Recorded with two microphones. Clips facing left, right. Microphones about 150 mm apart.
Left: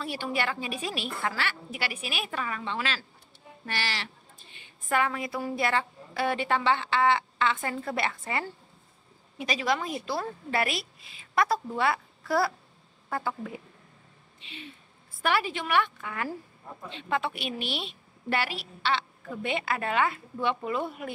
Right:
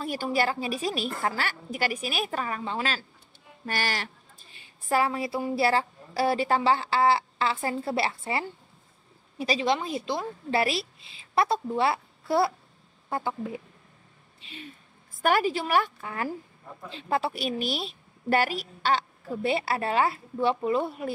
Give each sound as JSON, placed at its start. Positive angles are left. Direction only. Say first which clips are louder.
{"t": 0.0, "sound": "a woman's voice", "louder": "right 4 dB", "side_deg": -40}
{"t": 14.4, "sound": "a woman's voice", "louder": "right 1 dB", "side_deg": -40}